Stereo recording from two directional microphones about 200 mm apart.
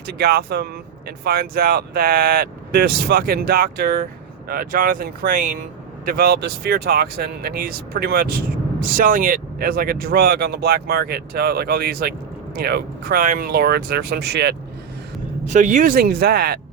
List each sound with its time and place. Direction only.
0.2 s speech: 50° right (ahead or behind)
15.5 s speech: 40° right (ahead or behind)